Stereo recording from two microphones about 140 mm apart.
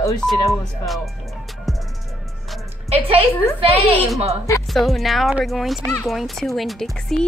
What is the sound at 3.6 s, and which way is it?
Speech, 45° right (ahead or behind).